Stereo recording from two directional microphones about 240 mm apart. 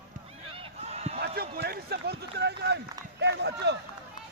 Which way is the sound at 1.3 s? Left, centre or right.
Right.